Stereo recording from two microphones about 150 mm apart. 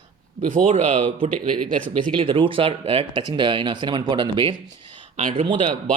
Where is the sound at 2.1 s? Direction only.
35° right (ahead or behind).